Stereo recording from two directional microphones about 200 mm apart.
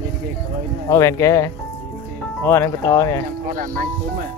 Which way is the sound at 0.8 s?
15° left (ahead or behind).